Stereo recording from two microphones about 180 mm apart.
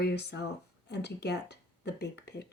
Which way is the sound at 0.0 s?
65° left (ahead or behind).